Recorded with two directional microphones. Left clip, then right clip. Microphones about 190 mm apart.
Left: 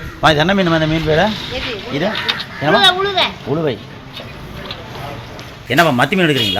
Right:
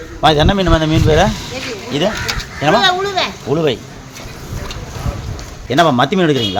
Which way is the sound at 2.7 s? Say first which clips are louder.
Left 3 dB; 30° right (ahead or behind).